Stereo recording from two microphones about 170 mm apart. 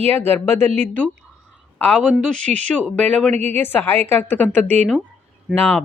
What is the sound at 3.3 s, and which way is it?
Speech, 40° right (ahead or behind).